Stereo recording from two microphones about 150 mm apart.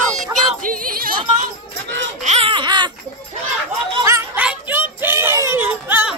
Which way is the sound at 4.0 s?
20° right (ahead or behind).